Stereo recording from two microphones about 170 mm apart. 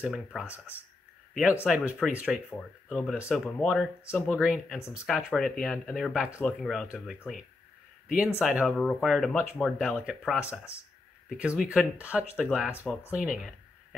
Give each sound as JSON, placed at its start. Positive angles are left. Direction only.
{"t": 0.0, "sound": "speech", "side_deg": -5}
{"t": 10.4, "sound": "speech", "side_deg": 15}
{"t": 11.2, "sound": "speech", "side_deg": -5}
{"t": 12.7, "sound": "speech", "side_deg": 15}
{"t": 13.1, "sound": "speech", "side_deg": -5}